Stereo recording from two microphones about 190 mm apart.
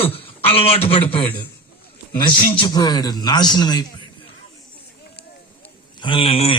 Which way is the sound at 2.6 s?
20° left (ahead or behind).